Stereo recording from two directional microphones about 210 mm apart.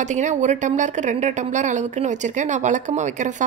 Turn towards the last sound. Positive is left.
turn(degrees=-35)  # may be behind; listen again after turning